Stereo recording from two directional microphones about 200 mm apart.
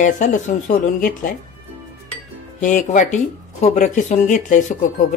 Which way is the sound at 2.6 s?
40° left (ahead or behind).